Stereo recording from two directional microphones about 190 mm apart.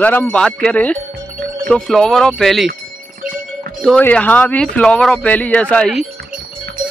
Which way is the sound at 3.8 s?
5° left (ahead or behind).